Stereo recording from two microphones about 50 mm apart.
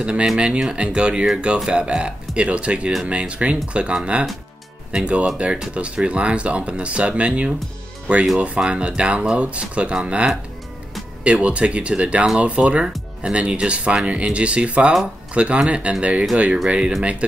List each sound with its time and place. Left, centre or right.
0.0 s speech: centre
8.5 s speech: centre